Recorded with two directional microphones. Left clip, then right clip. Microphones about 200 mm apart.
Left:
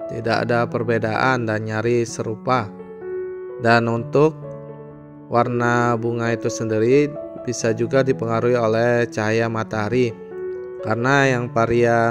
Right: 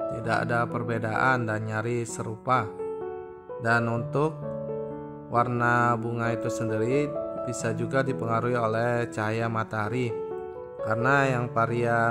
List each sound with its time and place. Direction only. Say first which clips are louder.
0.2 s speech: left 8 dB; 25° left (ahead or behind)
3.6 s speech: left 8 dB; 25° left (ahead or behind)
5.6 s speech: left 4 dB; 25° left (ahead or behind)